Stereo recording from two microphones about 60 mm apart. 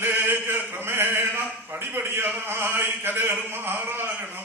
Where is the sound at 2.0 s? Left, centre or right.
Right.